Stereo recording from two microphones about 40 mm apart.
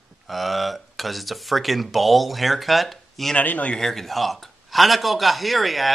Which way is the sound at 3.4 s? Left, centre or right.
Left.